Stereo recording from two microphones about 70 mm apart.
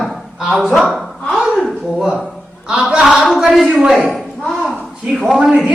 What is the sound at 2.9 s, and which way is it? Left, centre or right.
Speech, centre.